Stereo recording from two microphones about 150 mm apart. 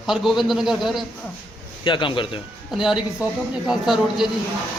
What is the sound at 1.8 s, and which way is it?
Speech, 35° left (ahead or behind).